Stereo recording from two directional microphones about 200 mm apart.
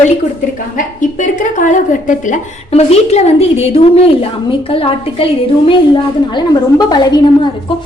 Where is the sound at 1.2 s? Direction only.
40° left (ahead or behind); by 7.2 s 20° left (ahead or behind).